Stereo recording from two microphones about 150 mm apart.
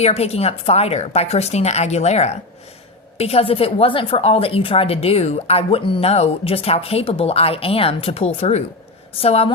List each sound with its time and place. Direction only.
0.0 s a woman's voice: 45° left (ahead or behind)